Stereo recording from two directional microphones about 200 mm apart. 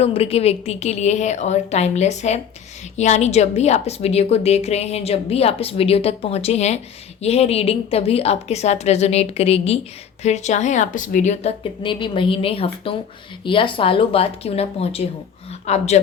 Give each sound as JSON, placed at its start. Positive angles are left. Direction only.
{"t": 0.0, "sound": "a woman's voice", "side_deg": 30}